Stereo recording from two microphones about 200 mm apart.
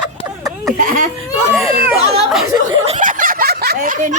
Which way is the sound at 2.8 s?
35° right (ahead or behind).